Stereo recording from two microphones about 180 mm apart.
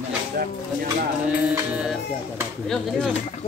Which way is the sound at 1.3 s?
5° right (ahead or behind).